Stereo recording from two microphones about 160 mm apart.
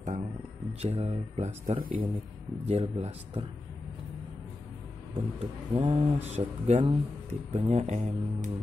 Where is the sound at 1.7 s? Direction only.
45° right (ahead or behind).